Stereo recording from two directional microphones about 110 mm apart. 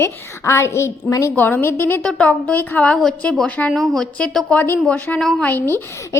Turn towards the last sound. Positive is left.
turn(degrees=20)  # may be behind; listen again after turning